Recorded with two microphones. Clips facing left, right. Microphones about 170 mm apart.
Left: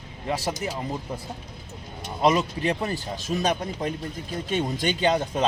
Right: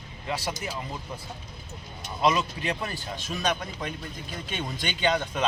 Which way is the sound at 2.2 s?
40° left (ahead or behind).